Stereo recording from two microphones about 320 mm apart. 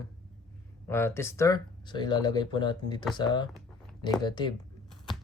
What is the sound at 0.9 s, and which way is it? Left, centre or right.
Speech, centre.